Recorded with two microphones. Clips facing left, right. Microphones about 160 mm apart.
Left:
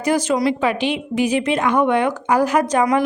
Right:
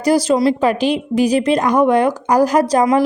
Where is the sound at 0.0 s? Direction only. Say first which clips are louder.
Right 4 dB; 35° right (ahead or behind).